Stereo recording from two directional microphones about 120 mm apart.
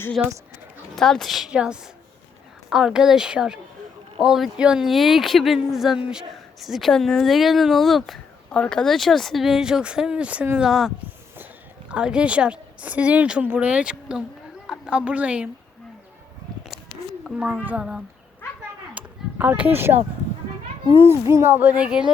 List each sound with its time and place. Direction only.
0.2 s speech: 10° right (ahead or behind)
0.9 s a woman's voice: 5° left (ahead or behind)
17.3 s speech: 10° right (ahead or behind)
18.9 s a sound: 10° right (ahead or behind)
21.0 s speech: 20° right (ahead or behind); by 22.1 s 5° right (ahead or behind)